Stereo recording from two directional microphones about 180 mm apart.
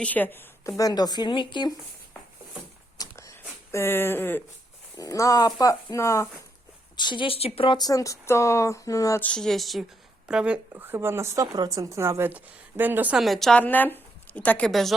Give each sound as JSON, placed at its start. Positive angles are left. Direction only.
{"t": 0.0, "sound": "a woman's voice", "side_deg": 10}
{"t": 3.0, "sound": "a sound", "side_deg": 20}
{"t": 3.7, "sound": "a woman's voice", "side_deg": 15}